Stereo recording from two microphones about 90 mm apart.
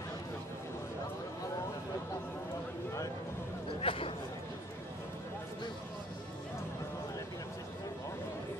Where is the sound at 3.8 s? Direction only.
90° left.